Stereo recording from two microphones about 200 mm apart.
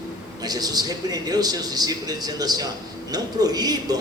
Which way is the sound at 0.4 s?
20° right (ahead or behind).